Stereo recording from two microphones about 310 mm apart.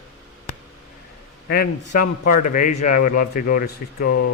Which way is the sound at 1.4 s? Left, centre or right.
Left.